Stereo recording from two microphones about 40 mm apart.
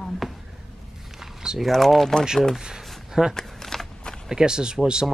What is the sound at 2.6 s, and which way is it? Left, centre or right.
Speech, centre.